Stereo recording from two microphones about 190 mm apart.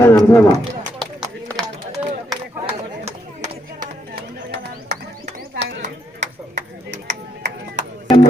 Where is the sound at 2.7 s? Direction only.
35° right (ahead or behind).